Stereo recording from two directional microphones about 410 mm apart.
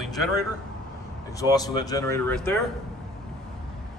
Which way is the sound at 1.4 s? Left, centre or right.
Centre.